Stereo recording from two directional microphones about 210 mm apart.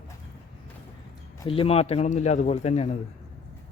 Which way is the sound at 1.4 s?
25° left (ahead or behind).